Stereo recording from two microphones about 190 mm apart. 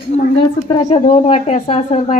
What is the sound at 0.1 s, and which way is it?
Speech, 35° left (ahead or behind).